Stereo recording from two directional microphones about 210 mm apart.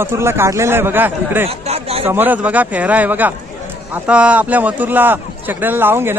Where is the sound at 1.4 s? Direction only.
30° right (ahead or behind).